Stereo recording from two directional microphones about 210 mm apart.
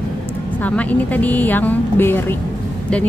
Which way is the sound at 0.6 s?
5° left (ahead or behind).